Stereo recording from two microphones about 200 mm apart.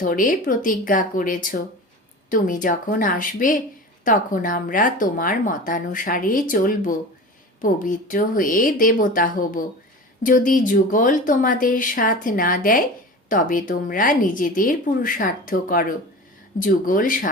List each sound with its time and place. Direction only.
0.0 s a woman's voice: 40° left (ahead or behind)